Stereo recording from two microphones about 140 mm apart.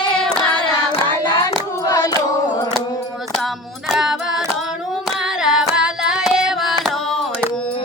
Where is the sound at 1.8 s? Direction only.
25° left (ahead or behind).